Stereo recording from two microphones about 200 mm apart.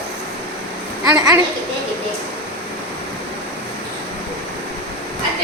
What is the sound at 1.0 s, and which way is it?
Speech, 15° right (ahead or behind).